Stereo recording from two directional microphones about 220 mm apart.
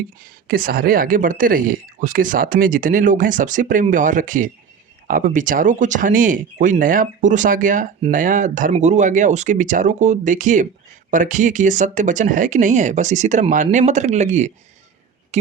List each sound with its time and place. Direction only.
0.4 s speech: 40° right (ahead or behind)